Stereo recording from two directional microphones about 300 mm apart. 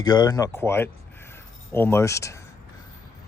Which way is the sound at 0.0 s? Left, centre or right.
Centre.